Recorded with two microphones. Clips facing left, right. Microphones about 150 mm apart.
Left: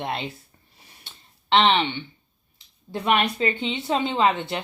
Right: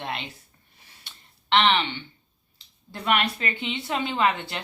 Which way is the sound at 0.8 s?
20° left (ahead or behind).